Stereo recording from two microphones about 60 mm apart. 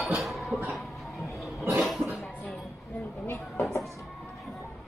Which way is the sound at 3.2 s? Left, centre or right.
Left.